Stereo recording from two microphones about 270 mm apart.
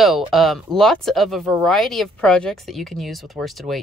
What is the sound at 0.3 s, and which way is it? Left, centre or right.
Speech, centre.